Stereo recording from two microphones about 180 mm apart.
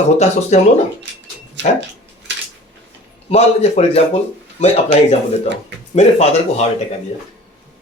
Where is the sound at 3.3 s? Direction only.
35° left (ahead or behind).